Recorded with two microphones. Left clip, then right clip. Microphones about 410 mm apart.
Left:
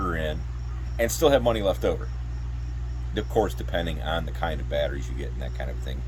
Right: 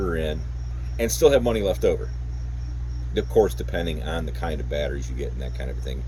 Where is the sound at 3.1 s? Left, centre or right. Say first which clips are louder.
Right 5 dB; left.